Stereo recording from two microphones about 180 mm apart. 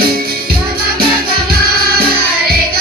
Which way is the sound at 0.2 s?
55° right (ahead or behind).